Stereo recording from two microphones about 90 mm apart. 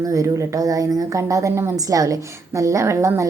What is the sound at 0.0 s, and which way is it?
A woman's voice, 35° right (ahead or behind).